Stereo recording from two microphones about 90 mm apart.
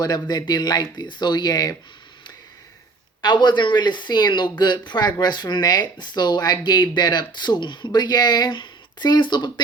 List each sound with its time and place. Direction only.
0.0 s speech: 45° left (ahead or behind)
3.2 s speech: 55° left (ahead or behind)